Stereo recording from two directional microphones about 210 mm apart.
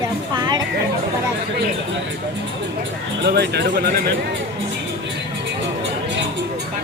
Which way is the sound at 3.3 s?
55° right (ahead or behind).